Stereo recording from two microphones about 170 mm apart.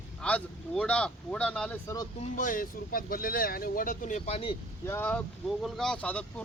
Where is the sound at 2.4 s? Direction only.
55° left (ahead or behind); by 4.5 s 35° left (ahead or behind).